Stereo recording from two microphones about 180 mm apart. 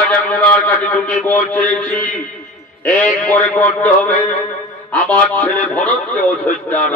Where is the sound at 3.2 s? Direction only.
10° left (ahead or behind).